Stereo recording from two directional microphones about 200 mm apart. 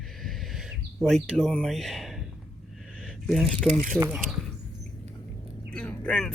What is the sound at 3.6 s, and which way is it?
Speech, 35° right (ahead or behind).